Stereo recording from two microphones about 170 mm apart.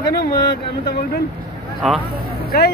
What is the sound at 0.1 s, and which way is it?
Speech, 70° left (ahead or behind).